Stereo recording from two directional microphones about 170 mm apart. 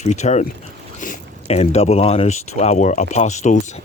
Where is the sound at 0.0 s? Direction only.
45° left (ahead or behind).